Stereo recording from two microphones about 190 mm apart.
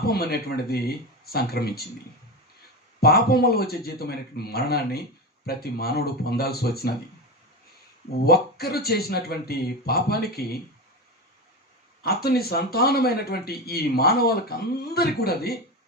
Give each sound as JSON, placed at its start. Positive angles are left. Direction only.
{"t": 0.1, "sound": "a man's voice", "side_deg": 55}
{"t": 3.0, "sound": "a man's voice", "side_deg": 55}
{"t": 8.2, "sound": "a man's voice", "side_deg": 55}
{"t": 12.0, "sound": "a man's voice", "side_deg": 55}